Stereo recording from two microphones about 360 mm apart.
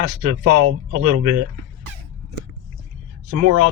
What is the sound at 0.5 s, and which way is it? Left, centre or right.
Speech, right.